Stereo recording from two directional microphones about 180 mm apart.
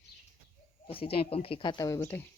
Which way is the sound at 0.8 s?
30° left (ahead or behind).